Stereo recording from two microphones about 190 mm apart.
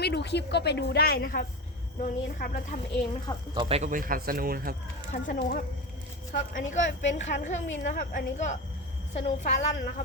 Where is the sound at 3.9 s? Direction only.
45° right (ahead or behind).